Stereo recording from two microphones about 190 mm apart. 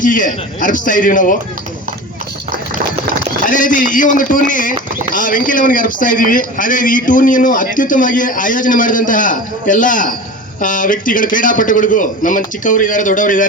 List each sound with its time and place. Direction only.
0.0 s speech: 45° left (ahead or behind)
3.4 s speech: 45° left (ahead or behind)